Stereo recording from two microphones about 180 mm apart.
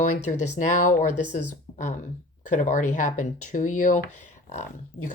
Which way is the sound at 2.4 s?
45° left (ahead or behind).